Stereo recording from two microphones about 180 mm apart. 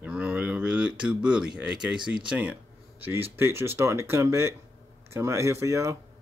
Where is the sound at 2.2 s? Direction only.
10° right (ahead or behind).